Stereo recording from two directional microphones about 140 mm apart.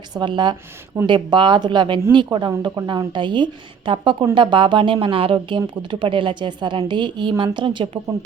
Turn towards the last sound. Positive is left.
turn(degrees=-35)  # may be behind; listen again after turning